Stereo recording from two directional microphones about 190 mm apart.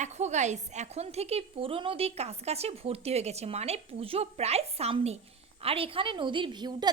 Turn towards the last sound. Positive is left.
turn(degrees=-20)  # may be behind; listen again after turning